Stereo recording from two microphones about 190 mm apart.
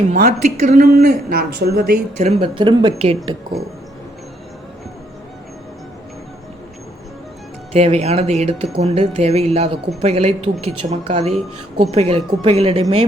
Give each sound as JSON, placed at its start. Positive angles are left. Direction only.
{"t": 0.1, "sound": "speech", "side_deg": -40}
{"t": 2.1, "sound": "speech", "side_deg": -35}
{"t": 7.7, "sound": "speech", "side_deg": -35}